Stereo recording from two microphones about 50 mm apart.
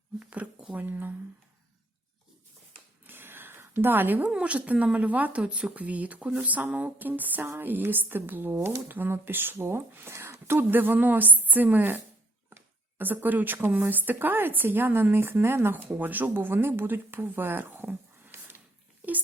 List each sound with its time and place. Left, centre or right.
0.2 s speech: right
3.1 s a sound: right
4.3 s a woman's voice: centre
4.5 s a woman's voice: right
8.5 s speech: right
8.9 s speech: right
10.1 s a woman's voice: right
15.9 s speech: right